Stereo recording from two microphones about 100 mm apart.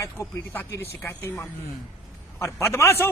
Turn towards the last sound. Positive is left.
turn(degrees=25)  # may be behind; listen again after turning